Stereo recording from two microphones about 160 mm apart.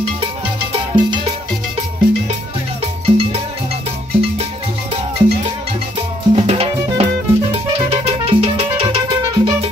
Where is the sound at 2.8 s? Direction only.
40° right (ahead or behind).